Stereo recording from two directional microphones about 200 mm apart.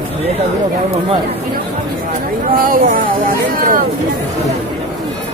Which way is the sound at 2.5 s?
45° right (ahead or behind).